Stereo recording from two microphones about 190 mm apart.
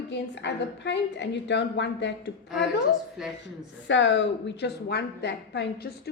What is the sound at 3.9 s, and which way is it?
A woman's voice, 75° left (ahead or behind).